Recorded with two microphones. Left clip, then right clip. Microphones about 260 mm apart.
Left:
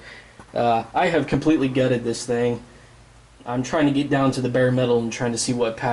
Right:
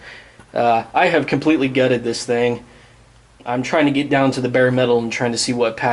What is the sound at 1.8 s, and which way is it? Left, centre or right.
Speech, right.